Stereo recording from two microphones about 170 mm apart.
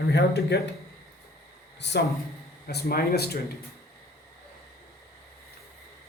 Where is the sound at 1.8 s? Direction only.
80° left.